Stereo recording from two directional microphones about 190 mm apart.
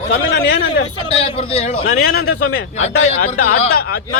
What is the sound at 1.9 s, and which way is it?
Speech, 55° left (ahead or behind).